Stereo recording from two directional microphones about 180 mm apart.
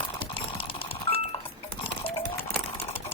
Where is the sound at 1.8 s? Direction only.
30° left (ahead or behind).